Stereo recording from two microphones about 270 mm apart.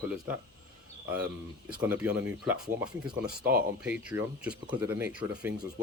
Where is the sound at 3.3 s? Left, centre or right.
Right.